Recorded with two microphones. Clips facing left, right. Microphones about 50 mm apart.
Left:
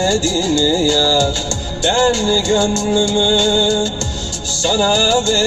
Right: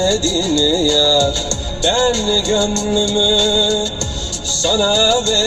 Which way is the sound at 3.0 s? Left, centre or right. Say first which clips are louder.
Even; centre.